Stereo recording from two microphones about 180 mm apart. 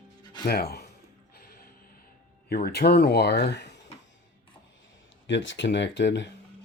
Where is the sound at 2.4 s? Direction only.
60° left (ahead or behind).